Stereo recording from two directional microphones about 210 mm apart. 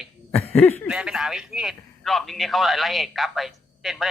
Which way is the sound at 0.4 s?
30° left (ahead or behind).